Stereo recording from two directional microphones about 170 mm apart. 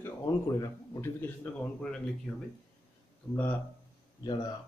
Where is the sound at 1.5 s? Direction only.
10° left (ahead or behind).